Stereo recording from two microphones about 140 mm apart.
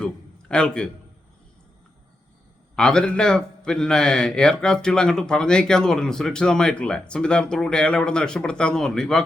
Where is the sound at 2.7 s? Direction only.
5° left (ahead or behind).